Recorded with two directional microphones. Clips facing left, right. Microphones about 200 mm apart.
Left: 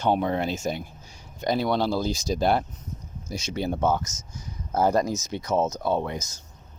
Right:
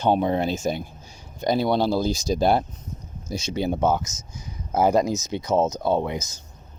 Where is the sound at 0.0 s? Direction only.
30° right (ahead or behind).